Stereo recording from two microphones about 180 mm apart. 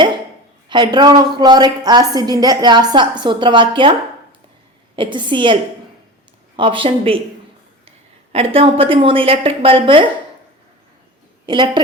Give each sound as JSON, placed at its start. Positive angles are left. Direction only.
{"t": 0.7, "sound": "a woman's voice", "side_deg": -25}
{"t": 4.9, "sound": "a woman's voice", "side_deg": -25}
{"t": 6.6, "sound": "a woman's voice", "side_deg": -30}
{"t": 11.4, "sound": "a woman's voice", "side_deg": -25}